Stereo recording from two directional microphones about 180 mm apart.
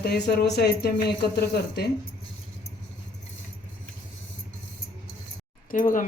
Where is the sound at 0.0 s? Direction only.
65° left (ahead or behind).